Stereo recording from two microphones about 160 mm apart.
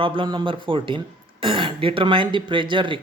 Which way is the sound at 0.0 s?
35° right (ahead or behind).